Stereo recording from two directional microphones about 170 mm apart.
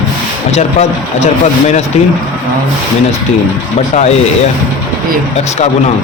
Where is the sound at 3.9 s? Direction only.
40° left (ahead or behind).